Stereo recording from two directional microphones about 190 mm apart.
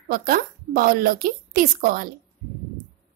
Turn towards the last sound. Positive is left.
turn(degrees=-50)  # may be behind; listen again after turning